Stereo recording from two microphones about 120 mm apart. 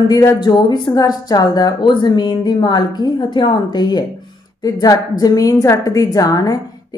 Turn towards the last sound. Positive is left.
turn(degrees=30)  # may be behind; listen again after turning